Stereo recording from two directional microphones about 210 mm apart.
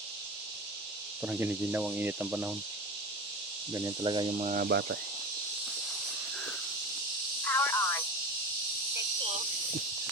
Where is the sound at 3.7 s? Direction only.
20° right (ahead or behind).